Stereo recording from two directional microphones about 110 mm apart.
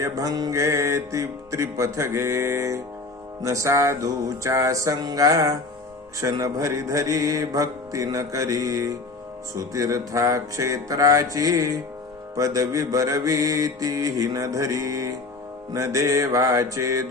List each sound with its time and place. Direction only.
0.0 s music: 30° right (ahead or behind)
6.3 s mantra: 30° right (ahead or behind)
15.7 s music: 30° right (ahead or behind)